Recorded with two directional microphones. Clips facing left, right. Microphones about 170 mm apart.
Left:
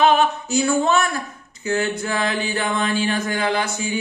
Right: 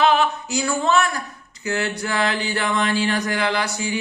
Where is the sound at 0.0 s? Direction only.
20° left (ahead or behind).